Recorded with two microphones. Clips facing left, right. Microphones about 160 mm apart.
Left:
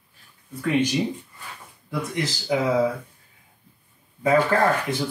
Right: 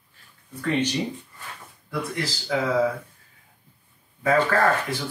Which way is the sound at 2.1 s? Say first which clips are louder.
Left 5 dB; 20° left (ahead or behind).